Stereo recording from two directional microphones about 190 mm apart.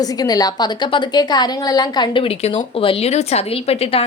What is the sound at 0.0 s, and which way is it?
A woman's voice, 20° left (ahead or behind).